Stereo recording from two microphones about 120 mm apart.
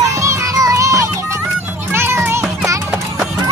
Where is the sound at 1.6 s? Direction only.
15° right (ahead or behind).